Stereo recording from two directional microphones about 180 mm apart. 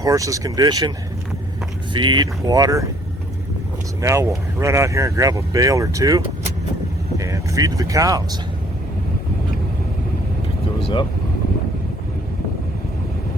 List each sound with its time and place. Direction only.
0.0 s speech: 20° right (ahead or behind)
4.0 s speech: 15° right (ahead or behind)
10.8 s vehicle: 30° left (ahead or behind)